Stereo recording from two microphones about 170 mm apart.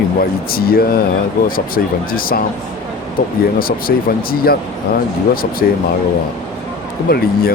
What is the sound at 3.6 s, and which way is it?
Speech, 60° left (ahead or behind).